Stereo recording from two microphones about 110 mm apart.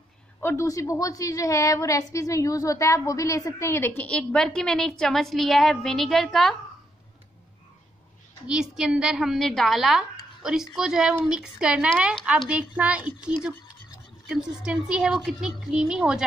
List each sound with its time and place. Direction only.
0.4 s a woman's voice: 25° left (ahead or behind); by 6.5 s centre (ahead or behind)
8.5 s a woman's voice: 5° right (ahead or behind)